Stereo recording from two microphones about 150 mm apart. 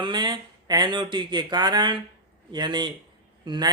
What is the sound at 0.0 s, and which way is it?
Speech, 30° right (ahead or behind).